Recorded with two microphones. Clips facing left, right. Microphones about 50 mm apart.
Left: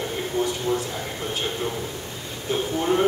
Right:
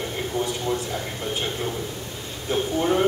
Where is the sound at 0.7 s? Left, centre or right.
Right.